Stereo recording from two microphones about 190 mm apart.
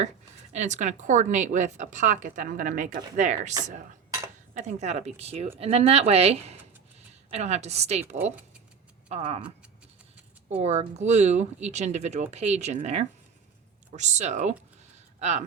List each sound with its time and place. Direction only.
0.5 s a woman's voice: 40° right (ahead or behind)
4.5 s a woman's voice: 35° right (ahead or behind)
9.0 s speech: 35° right (ahead or behind)
10.5 s a woman's voice: 35° right (ahead or behind)